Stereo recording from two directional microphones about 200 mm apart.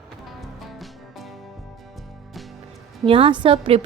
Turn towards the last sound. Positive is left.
turn(degrees=-25)  # may be behind; listen again after turning